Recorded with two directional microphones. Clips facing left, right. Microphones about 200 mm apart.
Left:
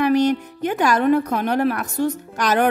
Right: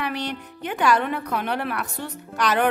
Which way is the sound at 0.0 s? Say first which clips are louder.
Left 12 dB; 45° left (ahead or behind).